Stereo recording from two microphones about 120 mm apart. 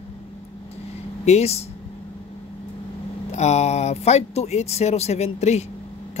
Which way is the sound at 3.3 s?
65° left (ahead or behind).